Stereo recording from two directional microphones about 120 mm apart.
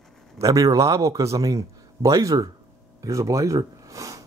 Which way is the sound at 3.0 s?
25° right (ahead or behind).